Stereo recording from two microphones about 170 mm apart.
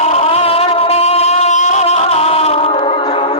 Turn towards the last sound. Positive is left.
turn(degrees=30)  # may be behind; listen again after turning